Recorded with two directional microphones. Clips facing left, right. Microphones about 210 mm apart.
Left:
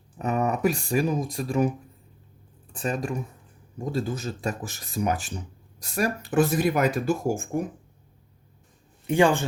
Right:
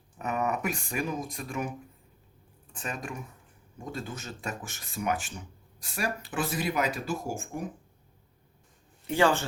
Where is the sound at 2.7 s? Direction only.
35° left (ahead or behind).